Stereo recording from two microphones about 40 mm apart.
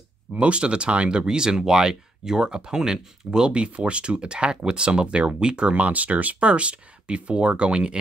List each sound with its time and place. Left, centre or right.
0.3 s speech: right
1.2 s speech: centre